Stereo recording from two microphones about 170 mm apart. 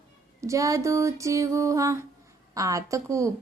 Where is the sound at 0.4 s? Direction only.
20° right (ahead or behind).